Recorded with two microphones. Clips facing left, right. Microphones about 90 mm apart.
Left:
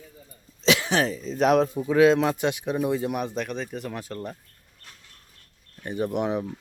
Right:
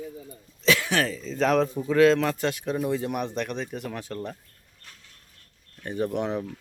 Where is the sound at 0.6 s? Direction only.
20° left (ahead or behind); by 4.3 s centre (ahead or behind).